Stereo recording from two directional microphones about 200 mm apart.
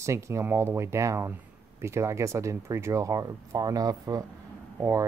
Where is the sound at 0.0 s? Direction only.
15° right (ahead or behind).